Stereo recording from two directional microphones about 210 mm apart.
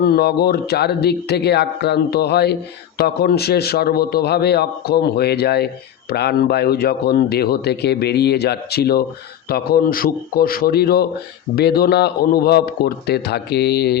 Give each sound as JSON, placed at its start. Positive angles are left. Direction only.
{"t": 0.0, "sound": "speech", "side_deg": 50}